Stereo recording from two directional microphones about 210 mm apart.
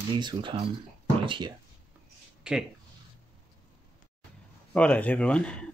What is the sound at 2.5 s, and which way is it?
Speech, 5° right (ahead or behind).